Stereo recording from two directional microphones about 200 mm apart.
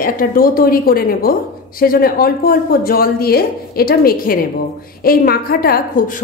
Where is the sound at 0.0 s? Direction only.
45° left (ahead or behind).